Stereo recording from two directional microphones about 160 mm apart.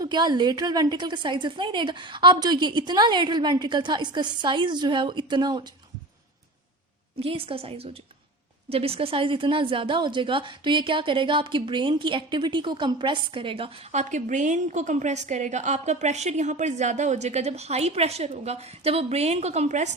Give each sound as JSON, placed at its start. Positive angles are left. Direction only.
{"t": 0.0, "sound": "a woman's voice", "side_deg": -25}
{"t": 7.2, "sound": "a woman's voice", "side_deg": -35}
{"t": 13.9, "sound": "a woman's voice", "side_deg": -50}